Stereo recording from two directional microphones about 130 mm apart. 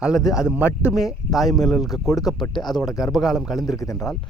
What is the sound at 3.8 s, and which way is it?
Speech, 25° left (ahead or behind).